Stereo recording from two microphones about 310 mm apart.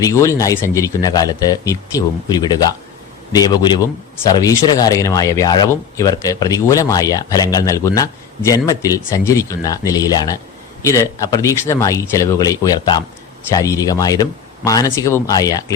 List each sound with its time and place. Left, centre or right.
0.0 s speech: centre